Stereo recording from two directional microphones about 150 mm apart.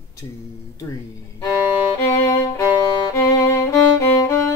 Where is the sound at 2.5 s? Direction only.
25° left (ahead or behind).